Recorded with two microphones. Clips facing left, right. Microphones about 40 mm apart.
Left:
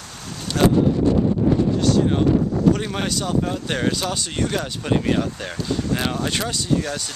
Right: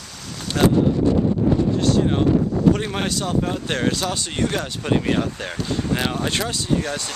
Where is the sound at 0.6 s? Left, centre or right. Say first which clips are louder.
Even; centre.